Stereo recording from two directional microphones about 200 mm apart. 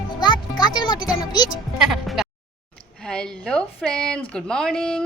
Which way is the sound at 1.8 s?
Centre (ahead or behind).